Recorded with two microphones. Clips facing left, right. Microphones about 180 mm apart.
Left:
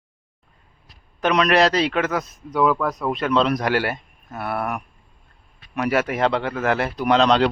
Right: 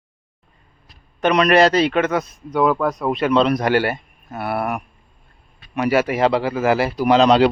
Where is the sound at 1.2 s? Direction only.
Centre (ahead or behind).